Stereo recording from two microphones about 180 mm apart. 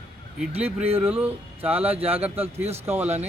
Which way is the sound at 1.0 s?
10° right (ahead or behind).